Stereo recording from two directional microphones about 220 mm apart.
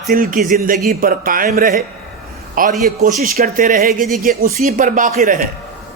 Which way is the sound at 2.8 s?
40° right (ahead or behind).